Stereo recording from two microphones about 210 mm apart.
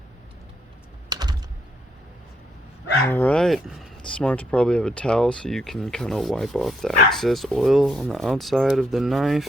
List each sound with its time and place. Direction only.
1.1 s typing: 20° right (ahead or behind)
3.1 s speech: 5° left (ahead or behind)